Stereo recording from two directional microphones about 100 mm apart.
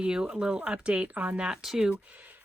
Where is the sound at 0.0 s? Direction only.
10° right (ahead or behind).